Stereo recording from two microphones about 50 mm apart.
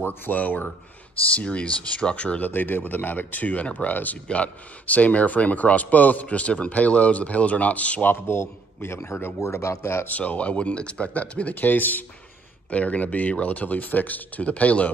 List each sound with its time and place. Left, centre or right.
0.0 s speech: left
2.5 s speech: left
8.1 s a man's voice: left
9.4 s speech: left
9.8 s speech: left
10.0 s speech: left
12.6 s speech: left